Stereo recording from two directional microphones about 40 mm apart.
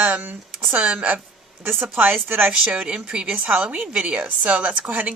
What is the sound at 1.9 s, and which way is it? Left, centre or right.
Speech, right.